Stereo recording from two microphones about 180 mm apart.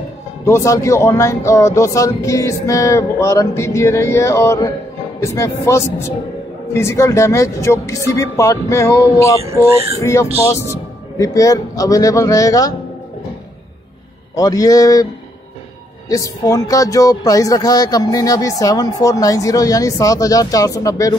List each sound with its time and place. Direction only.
0.5 s speech: 15° left (ahead or behind)
14.3 s speech: 20° left (ahead or behind)
16.1 s speech: 20° left (ahead or behind)